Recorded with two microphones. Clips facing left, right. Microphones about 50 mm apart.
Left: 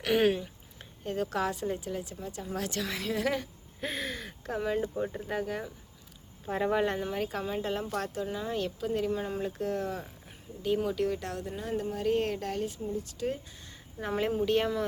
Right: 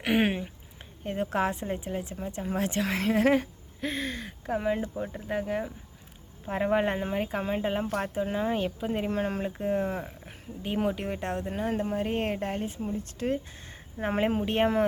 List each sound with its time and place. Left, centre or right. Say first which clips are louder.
0.0 s speech: even; right
3.8 s speech: right 3 dB; centre
4.5 s speech: right 2 dB; centre
4.9 s speech: right 1 dB; centre; by 8.3 s right
8.3 s speech: right 6 dB; right
8.5 s speech: right 2 dB; right
9.0 s speech: right 2 dB; right
9.4 s speech: right 3 dB; right
12.8 s speech: right 1 dB; right